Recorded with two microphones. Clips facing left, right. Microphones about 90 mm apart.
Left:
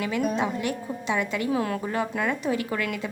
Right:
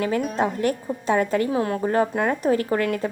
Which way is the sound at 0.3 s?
45° right (ahead or behind).